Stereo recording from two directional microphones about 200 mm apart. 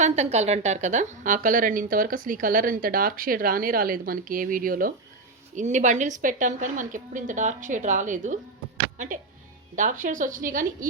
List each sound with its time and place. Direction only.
0.0 s a woman's voice: 35° right (ahead or behind)